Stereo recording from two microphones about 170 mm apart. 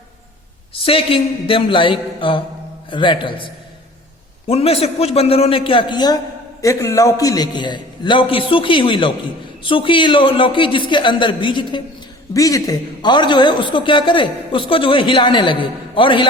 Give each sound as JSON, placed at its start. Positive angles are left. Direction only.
{"t": 0.7, "sound": "a man's voice", "side_deg": 35}